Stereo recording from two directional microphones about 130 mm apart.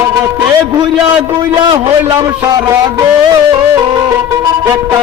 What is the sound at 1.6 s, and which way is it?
A man's voice, 35° right (ahead or behind).